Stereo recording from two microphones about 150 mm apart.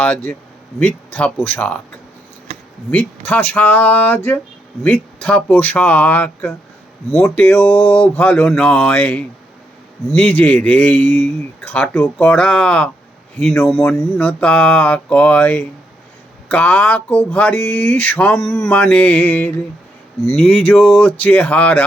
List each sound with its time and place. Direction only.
0.0 s speech: 10° left (ahead or behind)
2.9 s speech: 10° left (ahead or behind)
7.8 s mantra: 40° left (ahead or behind)
8.0 s speech: 10° left (ahead or behind)
14.2 s speech: 10° left (ahead or behind)
20.3 s a sound: 5° left (ahead or behind)
21.2 s speech: 10° left (ahead or behind)